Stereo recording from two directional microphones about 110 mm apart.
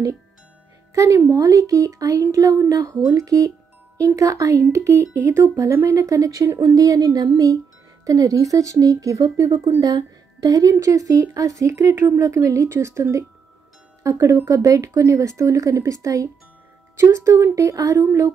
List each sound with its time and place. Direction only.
0.9 s speech: 30° right (ahead or behind)